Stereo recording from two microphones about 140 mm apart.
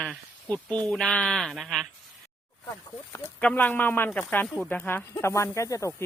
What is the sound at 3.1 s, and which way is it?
Speech, 15° left (ahead or behind).